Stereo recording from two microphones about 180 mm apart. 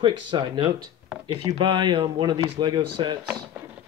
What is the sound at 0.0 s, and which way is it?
Speech, 25° right (ahead or behind).